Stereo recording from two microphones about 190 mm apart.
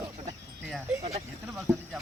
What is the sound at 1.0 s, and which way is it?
Speech, 35° right (ahead or behind).